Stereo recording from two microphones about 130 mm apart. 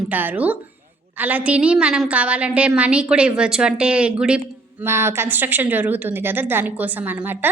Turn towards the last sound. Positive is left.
turn(degrees=-15)  # may be behind; listen again after turning